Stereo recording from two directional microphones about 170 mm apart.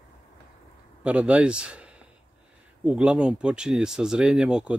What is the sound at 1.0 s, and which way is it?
A man's voice, 5° right (ahead or behind).